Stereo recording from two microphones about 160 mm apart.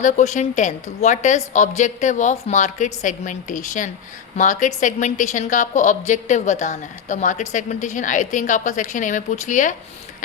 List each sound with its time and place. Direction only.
0.0 s a woman's voice: 50° left (ahead or behind)